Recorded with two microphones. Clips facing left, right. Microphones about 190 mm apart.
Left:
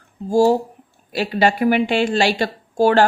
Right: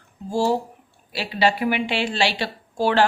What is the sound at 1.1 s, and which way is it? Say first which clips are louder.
Speech: left 4 dB; 50° left (ahead or behind).